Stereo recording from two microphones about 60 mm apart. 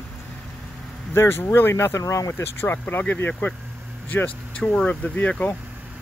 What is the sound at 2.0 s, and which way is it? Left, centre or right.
Speech, left.